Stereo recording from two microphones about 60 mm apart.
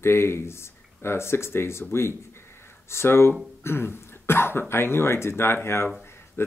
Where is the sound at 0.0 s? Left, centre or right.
Left.